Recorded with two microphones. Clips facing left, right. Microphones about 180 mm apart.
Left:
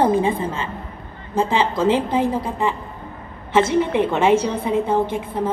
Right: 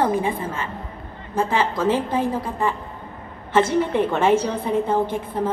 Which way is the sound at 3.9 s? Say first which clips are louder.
Left 1 dB; 15° left (ahead or behind).